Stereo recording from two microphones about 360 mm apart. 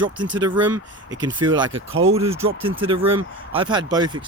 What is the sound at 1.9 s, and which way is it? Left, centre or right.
Speech, right.